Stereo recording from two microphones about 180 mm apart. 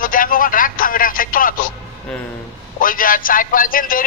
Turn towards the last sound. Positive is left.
turn(degrees=50)  # may be behind; listen again after turning